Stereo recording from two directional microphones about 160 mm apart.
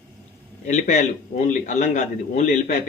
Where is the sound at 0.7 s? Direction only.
50° left (ahead or behind).